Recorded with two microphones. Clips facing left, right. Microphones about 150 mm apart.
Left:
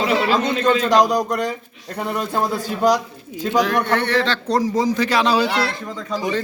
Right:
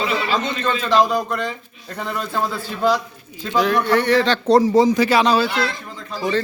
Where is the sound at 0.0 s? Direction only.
70° left (ahead or behind).